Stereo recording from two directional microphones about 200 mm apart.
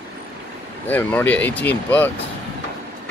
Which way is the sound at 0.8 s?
10° left (ahead or behind).